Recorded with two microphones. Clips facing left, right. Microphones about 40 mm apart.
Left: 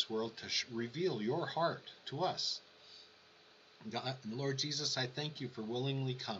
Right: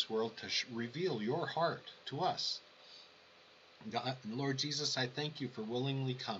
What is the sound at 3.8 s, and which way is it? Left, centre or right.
Speech, centre.